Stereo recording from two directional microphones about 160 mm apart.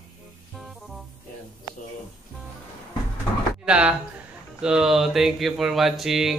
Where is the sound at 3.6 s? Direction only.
10° right (ahead or behind).